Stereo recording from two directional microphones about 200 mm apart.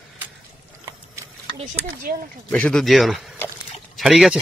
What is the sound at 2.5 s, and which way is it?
Speech, 5° left (ahead or behind).